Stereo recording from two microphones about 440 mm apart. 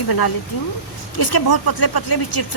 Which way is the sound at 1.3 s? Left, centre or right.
Left.